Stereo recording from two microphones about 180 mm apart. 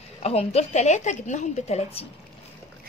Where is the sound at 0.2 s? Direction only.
35° left (ahead or behind).